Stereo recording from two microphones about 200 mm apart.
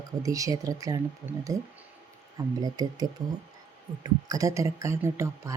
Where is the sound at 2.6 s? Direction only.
20° right (ahead or behind).